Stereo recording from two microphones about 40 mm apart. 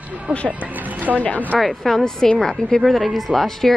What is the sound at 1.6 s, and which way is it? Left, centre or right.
A woman's voice, centre.